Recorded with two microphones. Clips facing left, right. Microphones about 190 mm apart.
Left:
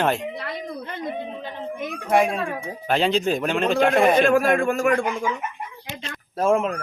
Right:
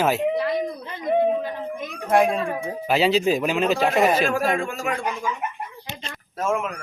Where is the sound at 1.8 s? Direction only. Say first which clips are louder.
Left 2 dB; 55° left (ahead or behind).